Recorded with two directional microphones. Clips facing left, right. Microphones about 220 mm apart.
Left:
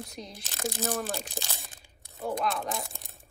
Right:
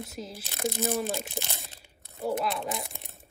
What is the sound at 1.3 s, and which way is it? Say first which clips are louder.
Crunch: right 2 dB; 20° right (ahead or behind).